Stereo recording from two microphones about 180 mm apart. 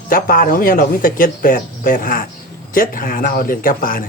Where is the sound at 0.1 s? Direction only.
50° left (ahead or behind).